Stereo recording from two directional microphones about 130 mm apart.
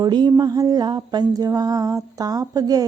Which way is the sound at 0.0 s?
35° right (ahead or behind).